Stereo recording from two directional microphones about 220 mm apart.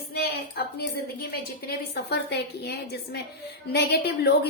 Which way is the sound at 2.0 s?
50° left (ahead or behind).